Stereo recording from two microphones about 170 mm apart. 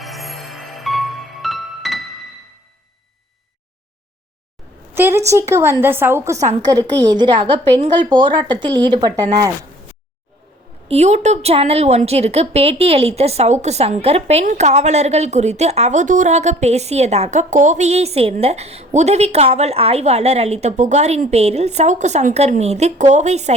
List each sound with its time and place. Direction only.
0.0 s music: centre (ahead or behind)
4.9 s a woman's voice: 15° right (ahead or behind)
10.8 s a woman's voice: 40° right (ahead or behind)